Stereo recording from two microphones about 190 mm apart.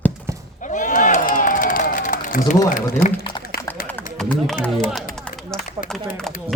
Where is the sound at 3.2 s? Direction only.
25° left (ahead or behind).